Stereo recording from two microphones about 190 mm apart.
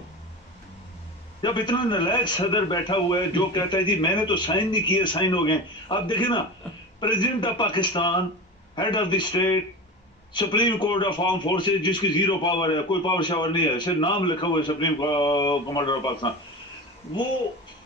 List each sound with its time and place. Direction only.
1.4 s a man's voice: 25° left (ahead or behind)